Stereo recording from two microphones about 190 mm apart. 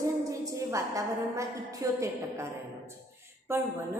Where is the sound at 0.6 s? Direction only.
15° right (ahead or behind).